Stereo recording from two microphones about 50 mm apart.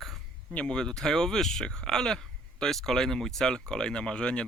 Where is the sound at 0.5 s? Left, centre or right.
Centre.